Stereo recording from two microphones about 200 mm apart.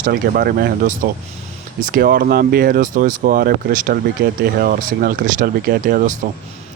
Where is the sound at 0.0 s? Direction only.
50° right (ahead or behind).